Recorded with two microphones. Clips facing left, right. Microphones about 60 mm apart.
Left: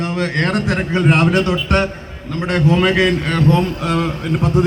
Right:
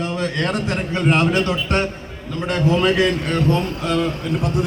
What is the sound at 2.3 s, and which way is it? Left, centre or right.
A man's voice, left.